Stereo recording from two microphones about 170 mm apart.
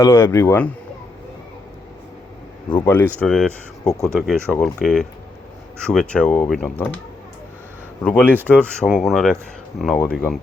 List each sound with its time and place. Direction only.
0.0 s speech: 15° left (ahead or behind)
2.6 s speech: 10° left (ahead or behind)
8.0 s speech: 10° left (ahead or behind)